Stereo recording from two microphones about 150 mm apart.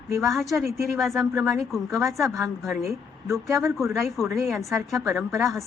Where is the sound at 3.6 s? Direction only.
20° right (ahead or behind).